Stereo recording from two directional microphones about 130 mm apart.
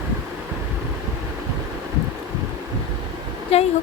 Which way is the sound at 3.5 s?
50° left (ahead or behind).